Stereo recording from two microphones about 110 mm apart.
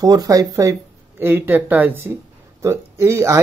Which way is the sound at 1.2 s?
20° right (ahead or behind).